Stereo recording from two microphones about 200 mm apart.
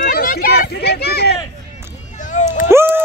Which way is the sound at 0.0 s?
45° left (ahead or behind).